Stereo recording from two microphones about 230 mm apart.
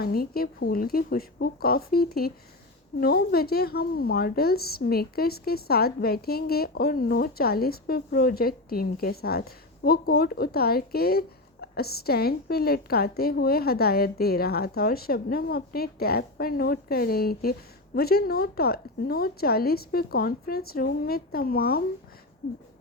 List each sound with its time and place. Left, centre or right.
0.0 s speech: left